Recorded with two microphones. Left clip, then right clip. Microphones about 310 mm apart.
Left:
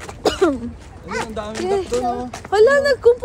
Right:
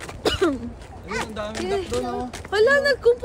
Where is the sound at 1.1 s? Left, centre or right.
Centre.